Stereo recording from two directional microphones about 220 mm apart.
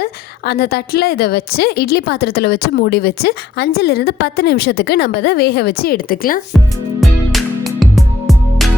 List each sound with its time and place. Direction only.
0.0 s a woman's voice: 45° left (ahead or behind)
7.3 s music: centre (ahead or behind)